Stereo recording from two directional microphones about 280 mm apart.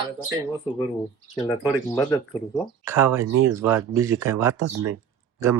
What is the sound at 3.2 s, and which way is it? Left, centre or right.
Speech, right.